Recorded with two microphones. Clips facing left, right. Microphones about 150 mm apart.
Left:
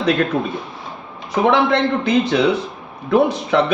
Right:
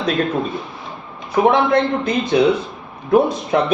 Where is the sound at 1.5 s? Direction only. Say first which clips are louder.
Even; 70° left (ahead or behind).